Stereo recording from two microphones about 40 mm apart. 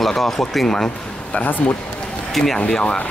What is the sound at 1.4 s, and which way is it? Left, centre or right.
Speech, left.